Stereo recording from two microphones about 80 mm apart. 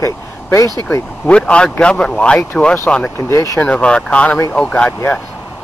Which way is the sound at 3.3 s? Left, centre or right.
Left.